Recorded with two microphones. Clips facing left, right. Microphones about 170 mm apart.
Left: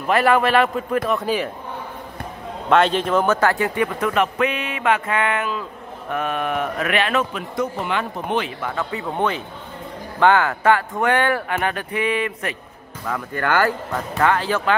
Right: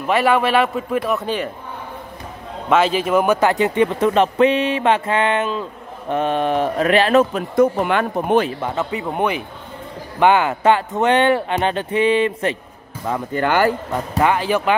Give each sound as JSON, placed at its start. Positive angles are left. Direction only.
{"t": 0.0, "sound": "a man's voice", "side_deg": 0}
{"t": 2.7, "sound": "speech", "side_deg": -5}
{"t": 8.5, "sound": "speech", "side_deg": -25}